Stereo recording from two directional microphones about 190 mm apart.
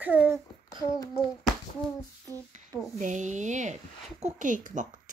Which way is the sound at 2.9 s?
40° right (ahead or behind).